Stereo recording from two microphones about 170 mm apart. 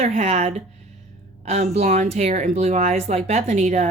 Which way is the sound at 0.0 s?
40° right (ahead or behind).